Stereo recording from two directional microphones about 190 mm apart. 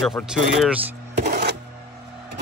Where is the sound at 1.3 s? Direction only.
55° right (ahead or behind).